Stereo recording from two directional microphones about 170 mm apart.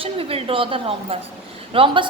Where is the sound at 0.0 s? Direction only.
35° right (ahead or behind).